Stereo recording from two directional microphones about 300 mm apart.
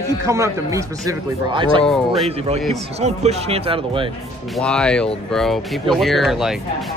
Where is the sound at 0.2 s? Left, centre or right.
Centre.